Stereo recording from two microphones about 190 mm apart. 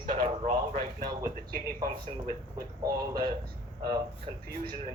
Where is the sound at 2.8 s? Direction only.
20° right (ahead or behind).